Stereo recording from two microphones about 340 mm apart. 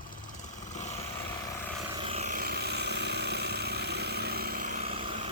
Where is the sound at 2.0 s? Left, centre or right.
Centre.